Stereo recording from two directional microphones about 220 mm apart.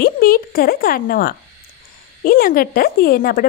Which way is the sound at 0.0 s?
40° left (ahead or behind).